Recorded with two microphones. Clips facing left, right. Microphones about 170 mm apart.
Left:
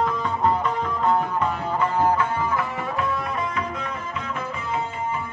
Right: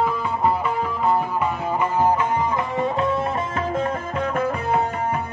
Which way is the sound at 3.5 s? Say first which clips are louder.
Right 6 dB; 45° right (ahead or behind).